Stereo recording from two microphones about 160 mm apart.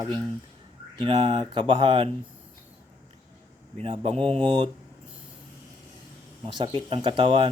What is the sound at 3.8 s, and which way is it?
Speech, 35° right (ahead or behind).